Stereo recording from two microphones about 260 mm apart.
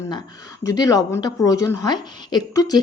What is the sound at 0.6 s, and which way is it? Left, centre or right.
A woman's voice, centre.